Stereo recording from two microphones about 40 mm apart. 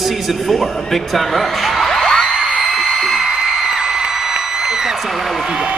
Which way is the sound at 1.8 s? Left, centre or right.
Centre.